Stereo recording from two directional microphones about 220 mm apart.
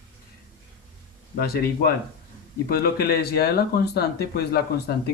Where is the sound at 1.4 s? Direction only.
45° left (ahead or behind).